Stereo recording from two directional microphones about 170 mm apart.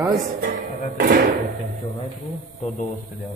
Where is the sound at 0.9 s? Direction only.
70° right (ahead or behind).